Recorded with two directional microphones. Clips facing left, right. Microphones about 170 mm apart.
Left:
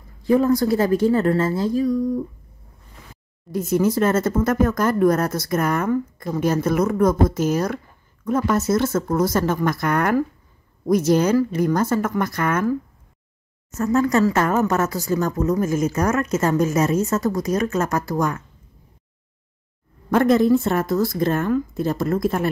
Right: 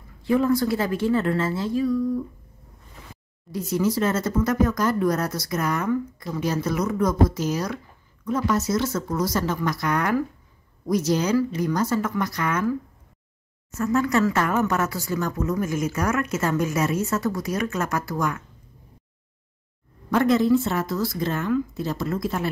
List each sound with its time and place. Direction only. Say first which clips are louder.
0.2 s speech: left 3 dB; 40° left (ahead or behind)
3.5 s speech: left 4 dB; 50° left (ahead or behind)
20.1 s speech: left 3 dB; 50° left (ahead or behind)